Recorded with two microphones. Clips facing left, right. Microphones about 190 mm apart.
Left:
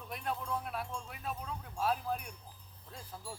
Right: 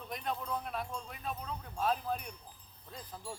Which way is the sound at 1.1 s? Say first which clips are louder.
Right 1 dB; 5° left (ahead or behind).